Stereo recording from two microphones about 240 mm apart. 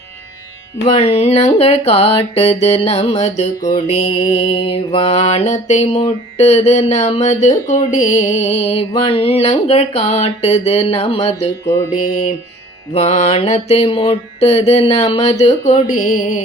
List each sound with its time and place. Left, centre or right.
0.9 s music: left
12.9 s music: left